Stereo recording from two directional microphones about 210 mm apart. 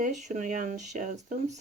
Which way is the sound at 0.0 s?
35° right (ahead or behind).